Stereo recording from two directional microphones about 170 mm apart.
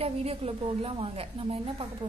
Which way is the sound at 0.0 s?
35° right (ahead or behind).